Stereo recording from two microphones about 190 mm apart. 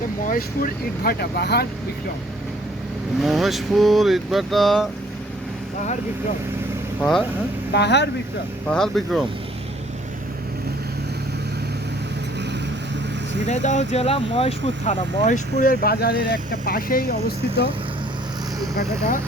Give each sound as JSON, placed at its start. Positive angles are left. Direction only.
{"t": 0.3, "sound": "speech", "side_deg": 50}
{"t": 3.2, "sound": "speech", "side_deg": 0}
{"t": 7.0, "sound": "speech", "side_deg": 0}
{"t": 7.7, "sound": "speech", "side_deg": 65}
{"t": 8.7, "sound": "speech", "side_deg": 0}
{"t": 13.4, "sound": "speech", "side_deg": 40}